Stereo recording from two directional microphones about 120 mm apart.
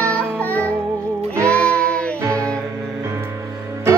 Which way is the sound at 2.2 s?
25° right (ahead or behind).